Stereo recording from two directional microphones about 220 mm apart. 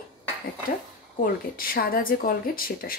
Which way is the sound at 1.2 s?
40° left (ahead or behind).